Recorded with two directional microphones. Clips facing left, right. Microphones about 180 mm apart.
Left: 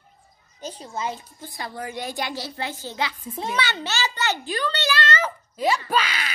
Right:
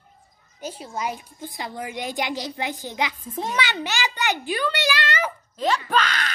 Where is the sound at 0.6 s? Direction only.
10° right (ahead or behind).